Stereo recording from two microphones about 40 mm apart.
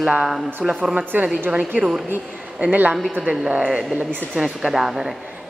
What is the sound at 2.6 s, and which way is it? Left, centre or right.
Speech, right.